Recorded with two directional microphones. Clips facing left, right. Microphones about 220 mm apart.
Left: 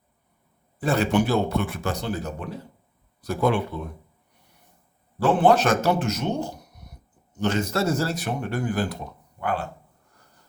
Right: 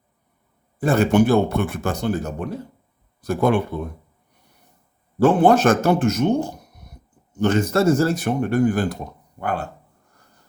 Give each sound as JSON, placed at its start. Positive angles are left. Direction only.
{"t": 0.8, "sound": "a man's voice", "side_deg": -50}
{"t": 5.2, "sound": "a man's voice", "side_deg": -45}